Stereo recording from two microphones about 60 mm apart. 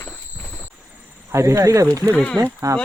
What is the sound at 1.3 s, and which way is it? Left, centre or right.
Speech, right.